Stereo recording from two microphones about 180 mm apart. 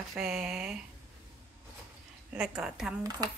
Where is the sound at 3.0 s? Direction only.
20° right (ahead or behind).